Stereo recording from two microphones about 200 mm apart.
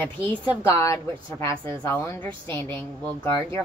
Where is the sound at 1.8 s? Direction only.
15° left (ahead or behind).